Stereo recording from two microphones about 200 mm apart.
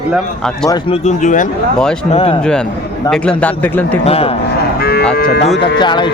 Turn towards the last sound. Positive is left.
turn(degrees=25)  # may be behind; listen again after turning